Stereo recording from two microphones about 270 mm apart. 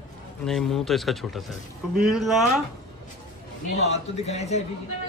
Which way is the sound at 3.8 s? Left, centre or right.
Left.